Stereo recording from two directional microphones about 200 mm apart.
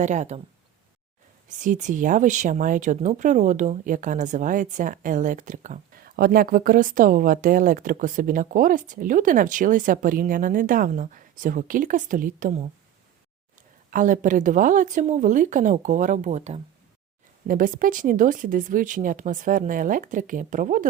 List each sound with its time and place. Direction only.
0.0 s speech: 35° right (ahead or behind)
1.5 s speech: 40° right (ahead or behind)
13.9 s speech: 40° right (ahead or behind)